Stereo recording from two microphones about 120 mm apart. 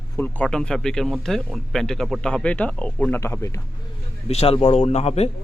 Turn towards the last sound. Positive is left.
turn(degrees=60)  # may be behind; listen again after turning